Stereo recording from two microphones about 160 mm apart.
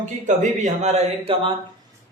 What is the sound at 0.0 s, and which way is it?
Speech, 50° right (ahead or behind).